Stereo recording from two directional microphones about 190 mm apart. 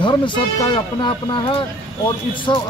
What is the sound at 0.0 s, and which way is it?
Speech, 25° left (ahead or behind).